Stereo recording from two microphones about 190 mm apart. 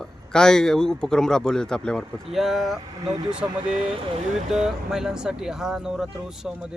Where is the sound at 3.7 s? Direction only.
30° right (ahead or behind).